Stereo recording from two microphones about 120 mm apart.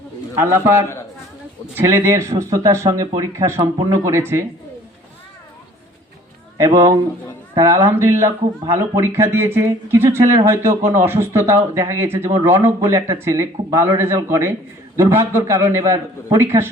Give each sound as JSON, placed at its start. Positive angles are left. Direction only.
{"t": 0.3, "sound": "speech", "side_deg": -20}
{"t": 7.5, "sound": "speech", "side_deg": -25}